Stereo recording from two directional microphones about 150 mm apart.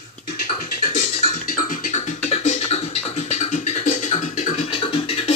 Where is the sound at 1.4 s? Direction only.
65° left (ahead or behind).